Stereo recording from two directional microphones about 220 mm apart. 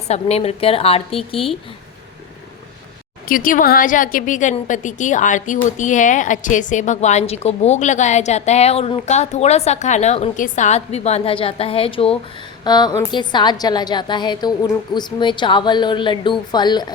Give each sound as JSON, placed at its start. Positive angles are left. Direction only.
{"t": 0.1, "sound": "a woman's voice", "side_deg": 30}
{"t": 3.2, "sound": "a woman's voice", "side_deg": 40}